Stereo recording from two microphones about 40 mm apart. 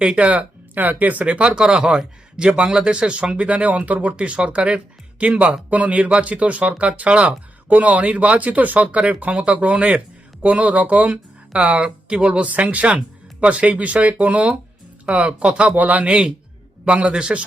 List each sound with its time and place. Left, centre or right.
0.0 s speech: right
0.3 s speech: right
1.2 s speech: right
15.7 s speech: right
16.0 s speech: right